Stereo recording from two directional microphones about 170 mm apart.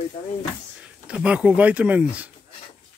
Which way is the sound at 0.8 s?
5° right (ahead or behind).